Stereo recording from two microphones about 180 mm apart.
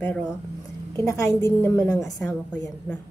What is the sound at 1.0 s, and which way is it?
Speech, 15° left (ahead or behind).